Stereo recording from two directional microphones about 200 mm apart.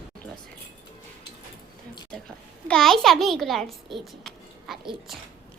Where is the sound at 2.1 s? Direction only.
5° left (ahead or behind).